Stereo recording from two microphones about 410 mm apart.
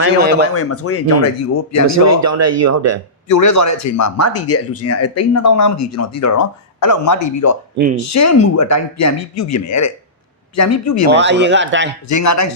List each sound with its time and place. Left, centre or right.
0.0 s speech: right
0.5 s speech: left
2.0 s speech: right
3.2 s speech: left
11.1 s speech: right
12.0 s speech: left